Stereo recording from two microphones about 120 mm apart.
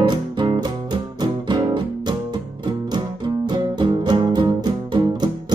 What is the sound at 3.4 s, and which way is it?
Music, 35° right (ahead or behind).